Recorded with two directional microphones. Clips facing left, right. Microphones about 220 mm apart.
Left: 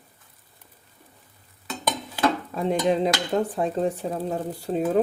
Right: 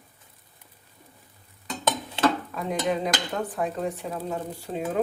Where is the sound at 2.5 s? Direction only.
30° left (ahead or behind).